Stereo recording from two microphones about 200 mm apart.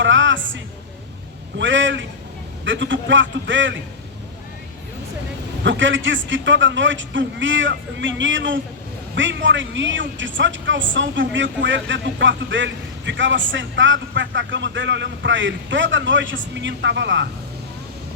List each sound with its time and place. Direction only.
0.0 s a woman's voice: 70° right (ahead or behind)
5.6 s speech: 65° right (ahead or behind)